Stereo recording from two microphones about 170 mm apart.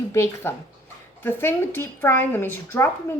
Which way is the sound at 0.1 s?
15° left (ahead or behind).